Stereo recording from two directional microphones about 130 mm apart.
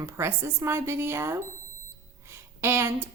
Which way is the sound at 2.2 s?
20° right (ahead or behind).